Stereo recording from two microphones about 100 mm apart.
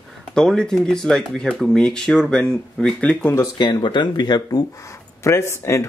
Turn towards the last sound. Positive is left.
turn(degrees=30)  # may be behind; listen again after turning